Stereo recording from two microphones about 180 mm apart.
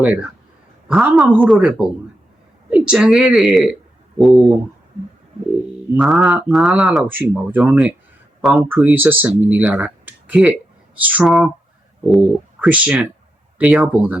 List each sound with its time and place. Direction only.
0.0 s speech: 5° right (ahead or behind)
6.0 s speech: 5° right (ahead or behind)